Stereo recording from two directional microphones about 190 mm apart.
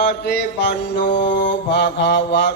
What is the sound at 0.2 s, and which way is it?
Mantra, 60° left (ahead or behind).